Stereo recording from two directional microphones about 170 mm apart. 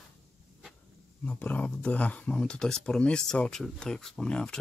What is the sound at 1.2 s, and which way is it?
Speech, 10° left (ahead or behind).